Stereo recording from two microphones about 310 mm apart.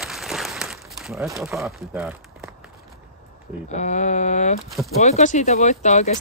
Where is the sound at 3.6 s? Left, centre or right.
Left.